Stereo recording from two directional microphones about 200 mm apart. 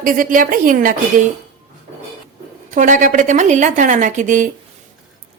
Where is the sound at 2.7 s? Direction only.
40° right (ahead or behind).